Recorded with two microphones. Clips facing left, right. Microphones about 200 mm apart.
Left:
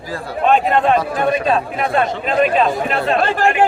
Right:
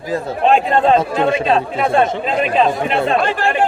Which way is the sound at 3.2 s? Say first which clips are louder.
Left 1 dB; 45° left (ahead or behind).